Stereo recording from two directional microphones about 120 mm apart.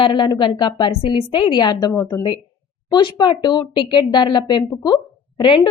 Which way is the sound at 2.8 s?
40° left (ahead or behind).